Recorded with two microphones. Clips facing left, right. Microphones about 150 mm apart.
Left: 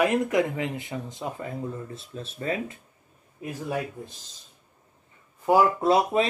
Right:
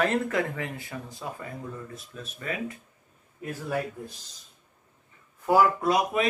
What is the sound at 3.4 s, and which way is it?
Speech, 15° left (ahead or behind).